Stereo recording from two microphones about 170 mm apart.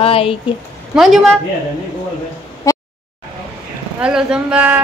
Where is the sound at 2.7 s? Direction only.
20° left (ahead or behind).